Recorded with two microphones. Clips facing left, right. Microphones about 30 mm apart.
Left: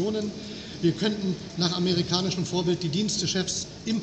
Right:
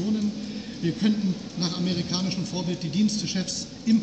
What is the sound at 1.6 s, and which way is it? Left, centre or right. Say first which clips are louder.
Speech: left 3 dB; left.